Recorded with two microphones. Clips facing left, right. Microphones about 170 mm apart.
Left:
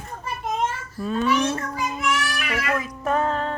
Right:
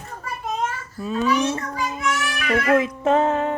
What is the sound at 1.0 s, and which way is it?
Speech, 5° right (ahead or behind).